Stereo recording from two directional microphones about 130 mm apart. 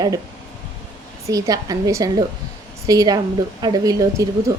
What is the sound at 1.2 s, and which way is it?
A woman's voice, 25° right (ahead or behind).